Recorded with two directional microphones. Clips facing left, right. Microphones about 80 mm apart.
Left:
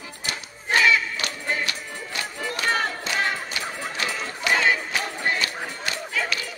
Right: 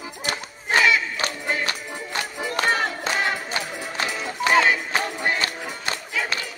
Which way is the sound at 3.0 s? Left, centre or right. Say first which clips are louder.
Right 2 dB; right.